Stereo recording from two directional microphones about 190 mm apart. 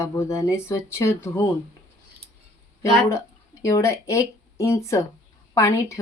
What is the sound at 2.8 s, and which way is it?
Speech, 15° left (ahead or behind).